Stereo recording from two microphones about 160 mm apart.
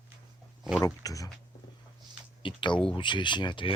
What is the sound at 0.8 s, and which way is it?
Speech, 20° left (ahead or behind).